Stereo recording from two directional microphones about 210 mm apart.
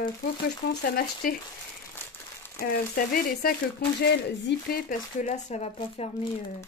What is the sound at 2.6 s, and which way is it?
Speech, 45° left (ahead or behind).